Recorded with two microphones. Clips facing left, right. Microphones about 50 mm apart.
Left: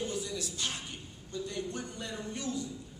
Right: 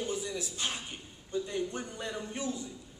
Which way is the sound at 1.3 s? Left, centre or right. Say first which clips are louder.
Right 4 dB; right.